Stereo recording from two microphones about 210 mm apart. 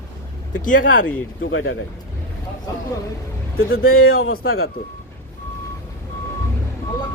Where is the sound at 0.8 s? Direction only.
65° left (ahead or behind).